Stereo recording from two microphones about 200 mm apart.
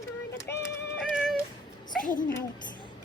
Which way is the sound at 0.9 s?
5° right (ahead or behind).